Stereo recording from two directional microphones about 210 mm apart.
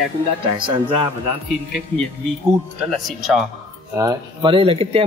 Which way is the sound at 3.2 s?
Centre (ahead or behind).